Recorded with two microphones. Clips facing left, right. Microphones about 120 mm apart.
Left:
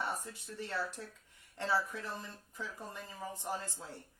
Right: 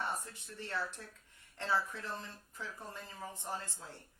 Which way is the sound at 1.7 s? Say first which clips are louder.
Even; 15° left (ahead or behind).